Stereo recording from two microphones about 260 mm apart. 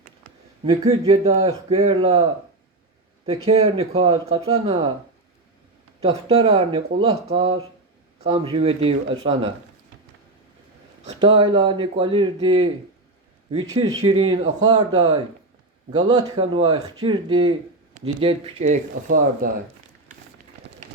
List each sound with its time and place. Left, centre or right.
0.6 s speech: right
3.4 s speech: right
6.0 s speech: right
11.1 s speech: centre